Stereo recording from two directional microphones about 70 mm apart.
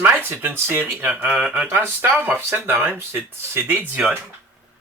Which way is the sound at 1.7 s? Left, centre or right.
Right.